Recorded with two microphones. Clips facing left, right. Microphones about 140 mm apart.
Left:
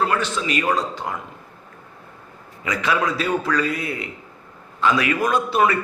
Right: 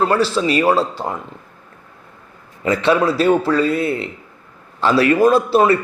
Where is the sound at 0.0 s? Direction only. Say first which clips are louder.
Right 6 dB; 35° right (ahead or behind).